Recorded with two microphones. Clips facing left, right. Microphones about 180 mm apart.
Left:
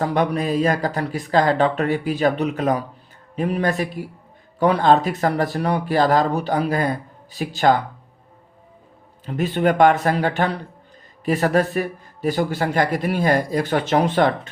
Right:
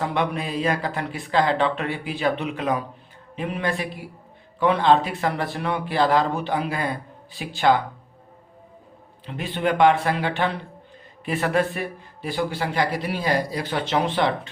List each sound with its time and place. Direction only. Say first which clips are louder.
0.0 s speech: left 4 dB; 40° left (ahead or behind)
9.2 s a man's voice: left 5 dB; 45° left (ahead or behind)